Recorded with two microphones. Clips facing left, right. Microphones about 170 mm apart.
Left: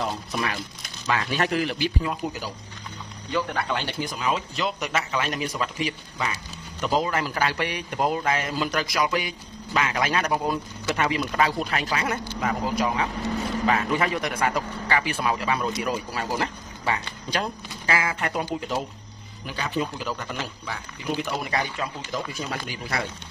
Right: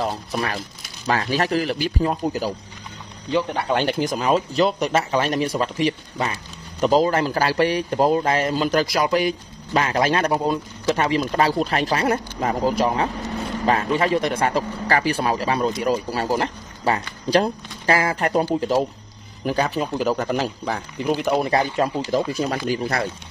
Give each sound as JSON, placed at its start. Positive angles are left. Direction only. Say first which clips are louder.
{"t": 0.0, "sound": "speech", "louder": "right 3 dB", "side_deg": -40}
{"t": 3.3, "sound": "speech", "louder": "right 5 dB", "side_deg": -25}
{"t": 4.0, "sound": "speech", "louder": "right 7 dB", "side_deg": -45}
{"t": 21.5, "sound": "speech", "louder": "right 8 dB", "side_deg": -40}